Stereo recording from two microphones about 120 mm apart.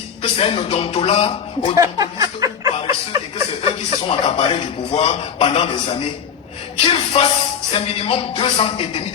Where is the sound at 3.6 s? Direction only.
50° left (ahead or behind).